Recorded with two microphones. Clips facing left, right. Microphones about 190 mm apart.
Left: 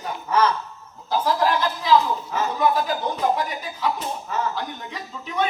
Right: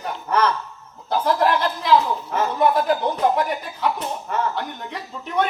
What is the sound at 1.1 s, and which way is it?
Speech, 60° right (ahead or behind).